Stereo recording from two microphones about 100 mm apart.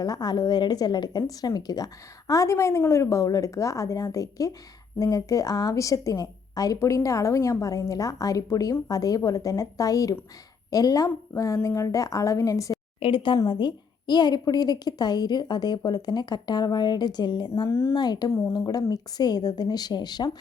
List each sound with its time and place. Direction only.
0.0 s a woman's voice: 40° left (ahead or behind)
13.0 s a woman's voice: 60° left (ahead or behind)
17.5 s speech: 30° left (ahead or behind)
17.9 s a woman's voice: 45° left (ahead or behind)